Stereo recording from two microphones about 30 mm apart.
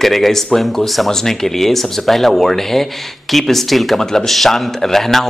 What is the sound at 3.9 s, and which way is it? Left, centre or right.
A man's voice, centre.